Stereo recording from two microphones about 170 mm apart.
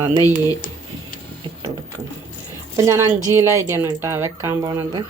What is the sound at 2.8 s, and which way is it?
Speech, 15° right (ahead or behind).